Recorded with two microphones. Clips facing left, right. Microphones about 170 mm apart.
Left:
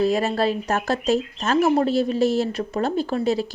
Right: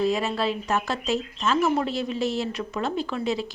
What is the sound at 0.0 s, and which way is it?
A woman's voice, 40° left (ahead or behind).